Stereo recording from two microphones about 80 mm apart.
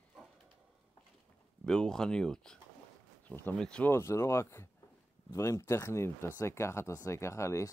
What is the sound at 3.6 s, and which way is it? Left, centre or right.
Speech, centre.